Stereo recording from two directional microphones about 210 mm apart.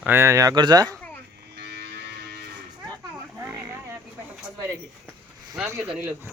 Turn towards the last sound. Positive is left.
turn(degrees=-10)  # may be behind; listen again after turning